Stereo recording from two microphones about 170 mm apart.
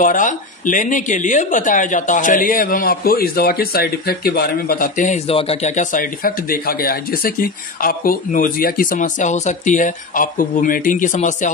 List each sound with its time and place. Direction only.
0.0 s speech: 50° left (ahead or behind)
5.3 s speech: 35° left (ahead or behind)